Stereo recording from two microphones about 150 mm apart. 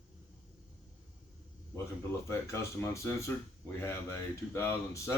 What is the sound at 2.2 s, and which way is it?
Speech, 20° left (ahead or behind).